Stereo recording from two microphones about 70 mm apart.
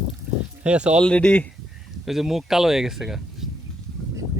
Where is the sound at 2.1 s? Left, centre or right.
Centre.